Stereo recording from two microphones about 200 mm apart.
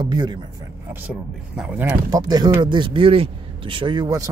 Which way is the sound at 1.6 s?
10° right (ahead or behind).